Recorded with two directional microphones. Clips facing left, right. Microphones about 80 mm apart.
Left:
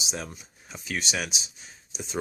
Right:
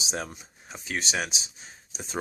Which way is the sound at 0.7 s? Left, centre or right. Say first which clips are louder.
Even; right.